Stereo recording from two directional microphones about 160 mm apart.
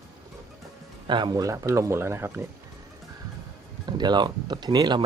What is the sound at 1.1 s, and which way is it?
Speech, 25° right (ahead or behind).